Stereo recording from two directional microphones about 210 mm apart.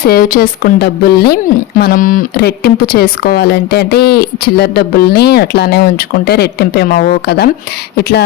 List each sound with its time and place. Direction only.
0.0 s speech: 45° left (ahead or behind)